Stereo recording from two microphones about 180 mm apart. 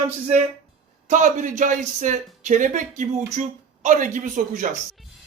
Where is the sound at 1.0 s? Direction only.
45° right (ahead or behind).